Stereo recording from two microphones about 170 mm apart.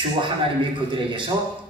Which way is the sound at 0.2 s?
30° right (ahead or behind).